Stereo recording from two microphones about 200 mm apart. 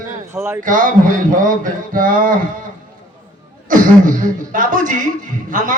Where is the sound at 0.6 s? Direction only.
45° right (ahead or behind).